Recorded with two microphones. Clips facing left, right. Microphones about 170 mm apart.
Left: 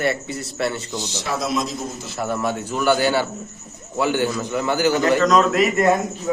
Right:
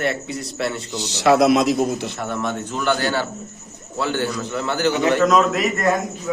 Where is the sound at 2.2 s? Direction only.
5° left (ahead or behind).